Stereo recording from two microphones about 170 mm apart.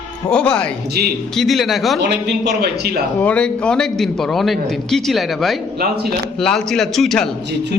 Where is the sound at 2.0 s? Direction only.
80° right.